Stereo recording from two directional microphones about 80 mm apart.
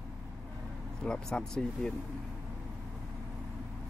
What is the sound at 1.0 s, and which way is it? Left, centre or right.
Speech, centre.